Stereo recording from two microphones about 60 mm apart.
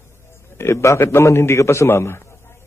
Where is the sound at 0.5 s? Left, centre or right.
Left.